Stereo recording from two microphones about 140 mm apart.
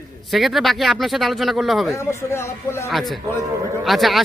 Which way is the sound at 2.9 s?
Centre (ahead or behind).